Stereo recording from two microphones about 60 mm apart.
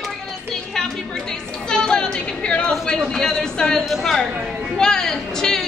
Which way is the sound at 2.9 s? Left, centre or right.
Centre.